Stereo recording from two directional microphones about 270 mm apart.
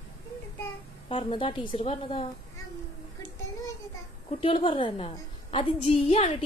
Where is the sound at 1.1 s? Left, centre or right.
Centre.